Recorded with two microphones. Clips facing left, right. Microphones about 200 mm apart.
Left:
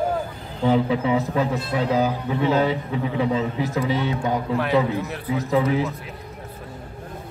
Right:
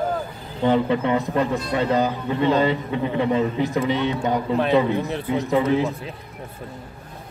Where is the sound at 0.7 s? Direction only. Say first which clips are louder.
Even; 5° left (ahead or behind).